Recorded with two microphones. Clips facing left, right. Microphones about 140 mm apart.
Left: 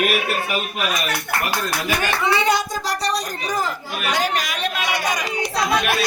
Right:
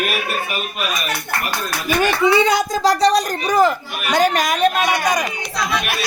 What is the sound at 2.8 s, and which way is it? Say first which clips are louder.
Speech: right 9 dB; 90° right.